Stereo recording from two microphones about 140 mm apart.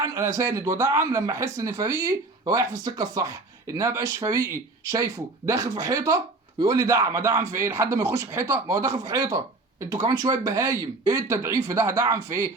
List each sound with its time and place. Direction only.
0.0 s speech: 25° right (ahead or behind)